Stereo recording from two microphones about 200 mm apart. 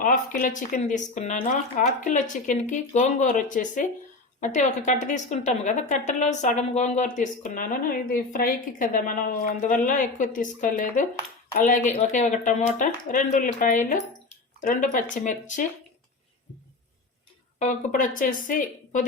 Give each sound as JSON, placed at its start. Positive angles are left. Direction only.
{"t": 0.0, "sound": "a woman's voice", "side_deg": 40}
{"t": 17.6, "sound": "a woman's voice", "side_deg": 40}